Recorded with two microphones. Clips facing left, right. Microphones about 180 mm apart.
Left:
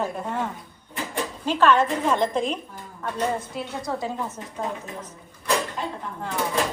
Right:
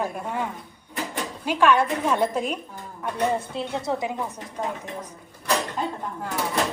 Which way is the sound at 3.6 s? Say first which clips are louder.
Right 2 dB; 25° right (ahead or behind).